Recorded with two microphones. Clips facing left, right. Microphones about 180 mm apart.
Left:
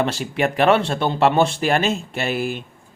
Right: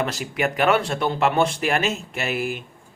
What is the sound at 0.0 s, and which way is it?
Speech, 30° left (ahead or behind).